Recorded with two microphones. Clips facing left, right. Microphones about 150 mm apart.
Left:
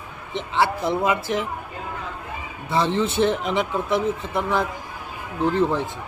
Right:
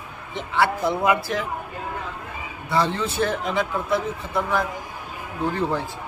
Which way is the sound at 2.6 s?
20° left (ahead or behind).